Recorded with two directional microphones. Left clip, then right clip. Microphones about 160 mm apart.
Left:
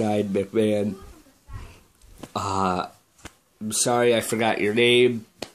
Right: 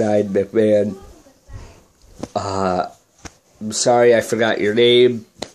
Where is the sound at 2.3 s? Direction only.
10° left (ahead or behind).